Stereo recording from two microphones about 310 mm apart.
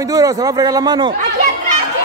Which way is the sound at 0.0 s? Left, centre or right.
Centre.